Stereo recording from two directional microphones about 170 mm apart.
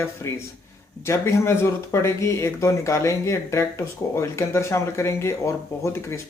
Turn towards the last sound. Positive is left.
turn(degrees=15)  # may be behind; listen again after turning